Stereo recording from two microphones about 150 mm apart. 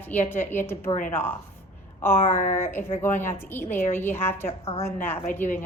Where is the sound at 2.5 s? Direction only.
15° left (ahead or behind).